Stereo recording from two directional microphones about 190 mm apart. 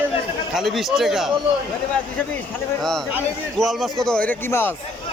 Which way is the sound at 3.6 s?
Centre (ahead or behind).